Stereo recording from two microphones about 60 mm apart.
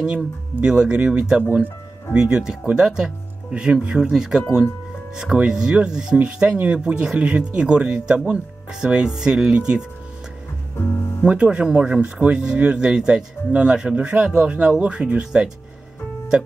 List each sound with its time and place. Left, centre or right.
0.7 s speech: centre
11.2 s speech: right